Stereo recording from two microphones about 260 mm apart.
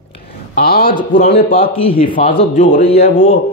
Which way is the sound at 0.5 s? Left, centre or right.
Left.